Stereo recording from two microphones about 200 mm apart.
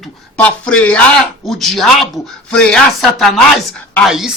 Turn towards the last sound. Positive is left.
turn(degrees=0)  # may be behind; listen again after turning